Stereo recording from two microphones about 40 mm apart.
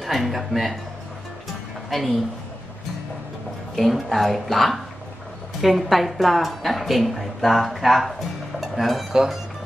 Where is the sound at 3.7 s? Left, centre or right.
Centre.